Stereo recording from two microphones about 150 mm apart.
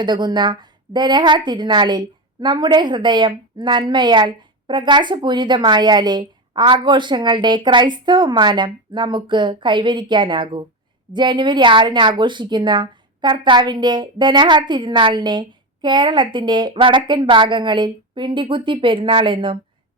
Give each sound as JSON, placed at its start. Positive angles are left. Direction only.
{"t": 0.0, "sound": "a woman's voice", "side_deg": -30}